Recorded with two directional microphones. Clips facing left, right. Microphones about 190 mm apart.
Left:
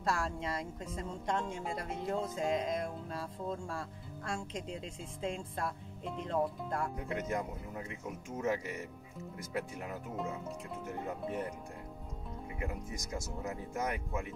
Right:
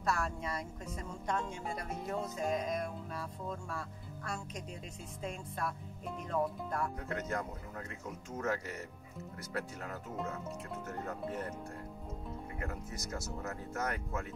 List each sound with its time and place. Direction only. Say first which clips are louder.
0.0 s speech: left 1 dB; 30° left (ahead or behind)
7.0 s speech: left 2 dB; 15° left (ahead or behind)
12.5 s speech: left 4 dB; 15° left (ahead or behind)